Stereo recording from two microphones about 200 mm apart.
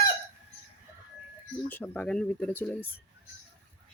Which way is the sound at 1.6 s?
10° left (ahead or behind).